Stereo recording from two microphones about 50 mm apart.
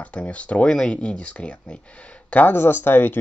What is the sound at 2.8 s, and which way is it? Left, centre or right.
Speech, left.